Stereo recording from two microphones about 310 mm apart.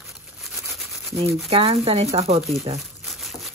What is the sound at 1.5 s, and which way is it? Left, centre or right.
Speech, centre.